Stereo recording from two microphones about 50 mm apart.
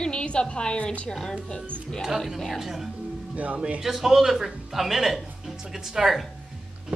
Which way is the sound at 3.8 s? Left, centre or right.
Centre.